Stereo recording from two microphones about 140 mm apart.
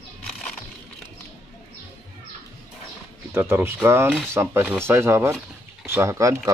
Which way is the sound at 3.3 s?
15° right (ahead or behind).